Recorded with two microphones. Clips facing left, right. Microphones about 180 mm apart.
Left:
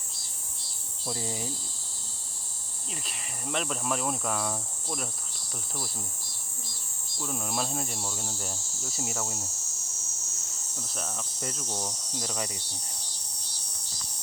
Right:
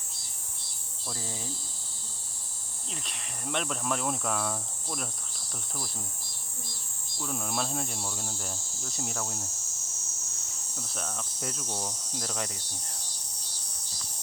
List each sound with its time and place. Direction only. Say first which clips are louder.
1.0 s speech: left 5 dB; 15° left (ahead or behind)
2.9 s cricket: left 1 dB; centre (ahead or behind)
7.2 s cricket: left 1 dB; centre (ahead or behind)
10.8 s cricket: even; centre (ahead or behind)